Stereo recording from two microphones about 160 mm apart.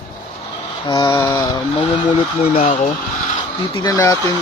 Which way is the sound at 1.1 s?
15° left (ahead or behind).